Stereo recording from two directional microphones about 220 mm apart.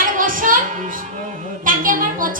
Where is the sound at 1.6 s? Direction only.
40° right (ahead or behind).